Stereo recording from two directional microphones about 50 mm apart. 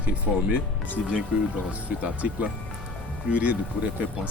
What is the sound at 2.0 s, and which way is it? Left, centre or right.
Speech, right.